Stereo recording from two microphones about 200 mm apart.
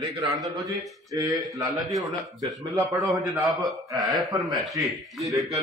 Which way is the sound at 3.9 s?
20° right (ahead or behind).